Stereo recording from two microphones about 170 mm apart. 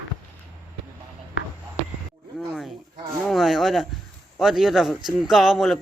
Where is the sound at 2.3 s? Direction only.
Centre (ahead or behind).